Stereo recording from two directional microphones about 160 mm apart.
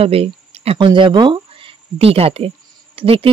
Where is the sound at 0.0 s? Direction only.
40° right (ahead or behind).